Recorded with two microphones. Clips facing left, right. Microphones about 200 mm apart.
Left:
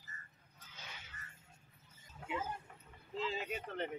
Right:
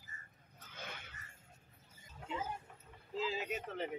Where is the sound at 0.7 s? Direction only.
55° right (ahead or behind).